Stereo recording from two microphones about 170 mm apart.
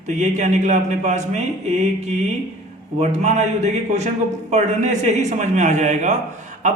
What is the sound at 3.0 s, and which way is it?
A man's voice, 45° right (ahead or behind).